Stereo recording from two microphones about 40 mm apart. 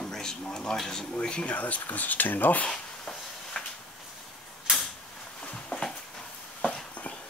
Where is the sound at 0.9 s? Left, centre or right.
Left.